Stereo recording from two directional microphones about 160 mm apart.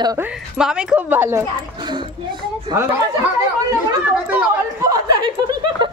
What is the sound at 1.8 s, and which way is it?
Speech, 30° right (ahead or behind).